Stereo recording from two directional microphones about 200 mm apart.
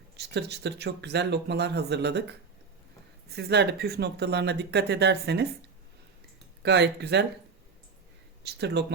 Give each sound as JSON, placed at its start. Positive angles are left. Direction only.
{"t": 0.2, "sound": "speech", "side_deg": -55}
{"t": 6.6, "sound": "speech", "side_deg": -55}
{"t": 8.5, "sound": "speech", "side_deg": -55}